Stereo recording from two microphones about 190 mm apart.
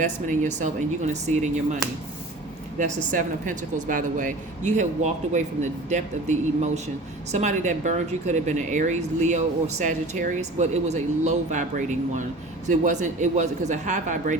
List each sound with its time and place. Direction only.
0.0 s speech: 40° right (ahead or behind)